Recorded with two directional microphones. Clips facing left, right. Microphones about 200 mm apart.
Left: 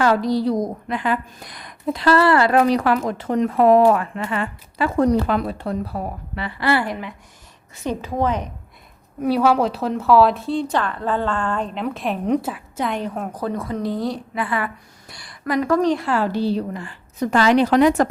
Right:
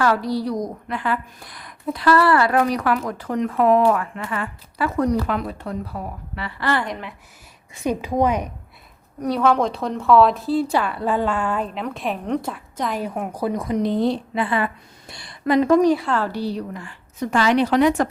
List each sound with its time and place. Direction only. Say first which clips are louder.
0.0 s speech: left 3 dB; 20° left (ahead or behind)
6.6 s a woman's voice: left 3 dB; 10° left (ahead or behind)
7.9 s a woman's voice: right 2 dB; 15° right (ahead or behind)
9.2 s a woman's voice: left 2 dB; 5° left (ahead or behind); by 15.8 s 25° right (ahead or behind)
15.8 s a woman's voice: right 2 dB; 10° right (ahead or behind)
16.0 s a woman's voice: left 2 dB; 10° left (ahead or behind)
16.3 s a woman's voice: left 4 dB; 25° left (ahead or behind); by 17.8 s 40° left (ahead or behind)